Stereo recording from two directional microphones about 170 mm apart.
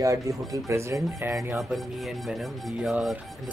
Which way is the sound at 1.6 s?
Centre (ahead or behind).